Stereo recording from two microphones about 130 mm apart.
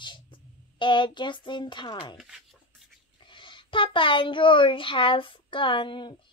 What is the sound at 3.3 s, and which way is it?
A child's voice, 40° left (ahead or behind).